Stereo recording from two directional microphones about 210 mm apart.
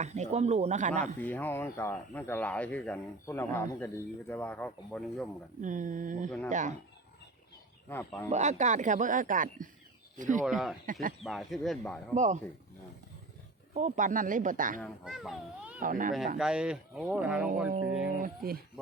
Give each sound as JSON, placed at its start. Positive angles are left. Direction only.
{"t": 0.0, "sound": "speech", "side_deg": -35}
{"t": 1.2, "sound": "speech", "side_deg": 10}
{"t": 5.6, "sound": "speech", "side_deg": -40}
{"t": 7.9, "sound": "speech", "side_deg": 10}
{"t": 8.3, "sound": "speech", "side_deg": -35}
{"t": 10.4, "sound": "speech", "side_deg": 0}
{"t": 12.1, "sound": "speech", "side_deg": -35}
{"t": 13.7, "sound": "speech", "side_deg": -35}
{"t": 14.8, "sound": "speech", "side_deg": 0}
{"t": 15.8, "sound": "speech", "side_deg": -40}
{"t": 16.4, "sound": "speech", "side_deg": -5}
{"t": 18.2, "sound": "speech", "side_deg": -45}